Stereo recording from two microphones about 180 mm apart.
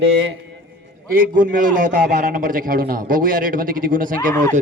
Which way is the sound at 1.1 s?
50° right (ahead or behind).